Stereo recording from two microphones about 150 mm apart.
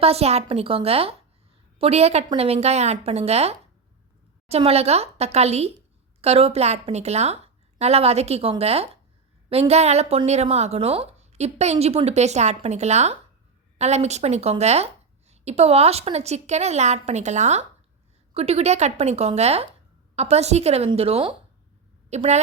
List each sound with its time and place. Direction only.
0.0 s a woman's voice: 45° right (ahead or behind)